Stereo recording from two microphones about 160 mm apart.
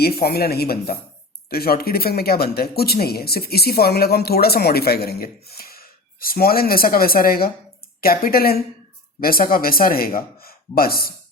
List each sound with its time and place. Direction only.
0.0 s speech: 75° left (ahead or behind)